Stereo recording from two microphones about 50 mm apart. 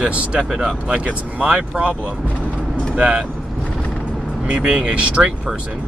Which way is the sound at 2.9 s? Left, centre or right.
Right.